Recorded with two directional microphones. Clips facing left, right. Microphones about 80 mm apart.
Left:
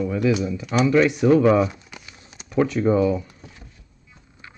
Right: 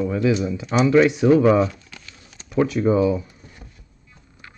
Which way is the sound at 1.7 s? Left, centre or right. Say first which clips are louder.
Even; centre.